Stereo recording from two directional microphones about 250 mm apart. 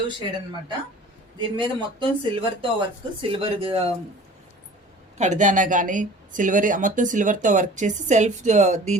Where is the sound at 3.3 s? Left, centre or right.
Right.